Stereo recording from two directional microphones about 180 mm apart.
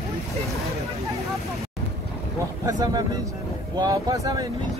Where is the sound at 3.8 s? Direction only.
20° right (ahead or behind).